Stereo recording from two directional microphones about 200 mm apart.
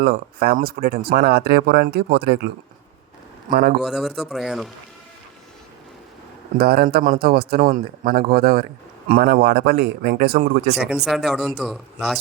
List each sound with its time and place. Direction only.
0.0 s speech: 50° right (ahead or behind)
3.5 s speech: 50° right (ahead or behind)
3.8 s speech: centre (ahead or behind)
6.6 s speech: 50° right (ahead or behind)
10.8 s speech: centre (ahead or behind)